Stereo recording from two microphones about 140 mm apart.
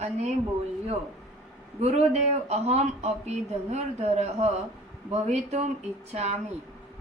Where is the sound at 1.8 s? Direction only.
50° right (ahead or behind).